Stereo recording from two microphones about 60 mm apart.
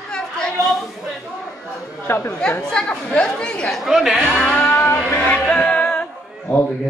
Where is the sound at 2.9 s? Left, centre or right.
Centre.